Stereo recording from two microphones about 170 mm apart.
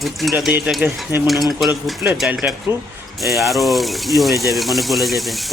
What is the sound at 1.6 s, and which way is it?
Speech, 5° right (ahead or behind).